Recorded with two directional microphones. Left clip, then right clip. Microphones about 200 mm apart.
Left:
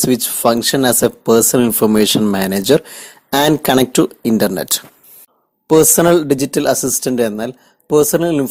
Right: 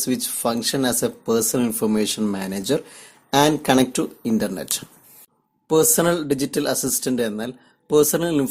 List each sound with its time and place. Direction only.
0.0 s speech: 35° left (ahead or behind)